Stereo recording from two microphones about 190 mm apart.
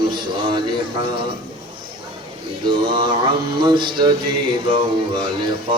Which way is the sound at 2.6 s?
25° right (ahead or behind).